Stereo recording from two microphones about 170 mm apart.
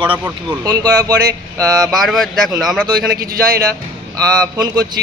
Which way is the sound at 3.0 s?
65° right (ahead or behind).